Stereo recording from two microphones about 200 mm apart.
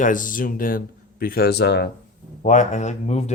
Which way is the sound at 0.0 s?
40° left (ahead or behind).